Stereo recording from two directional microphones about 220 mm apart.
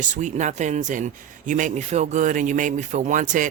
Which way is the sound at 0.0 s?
35° right (ahead or behind).